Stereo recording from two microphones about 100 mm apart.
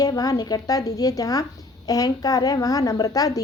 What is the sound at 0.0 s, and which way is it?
A woman's voice, 40° left (ahead or behind).